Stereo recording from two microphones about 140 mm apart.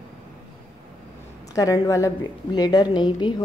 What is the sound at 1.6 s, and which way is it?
A woman's voice, 25° left (ahead or behind).